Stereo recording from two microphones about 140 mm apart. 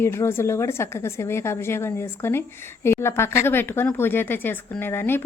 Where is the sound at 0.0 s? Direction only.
20° left (ahead or behind).